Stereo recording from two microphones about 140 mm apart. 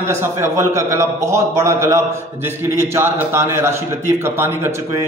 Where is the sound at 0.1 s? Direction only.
20° right (ahead or behind).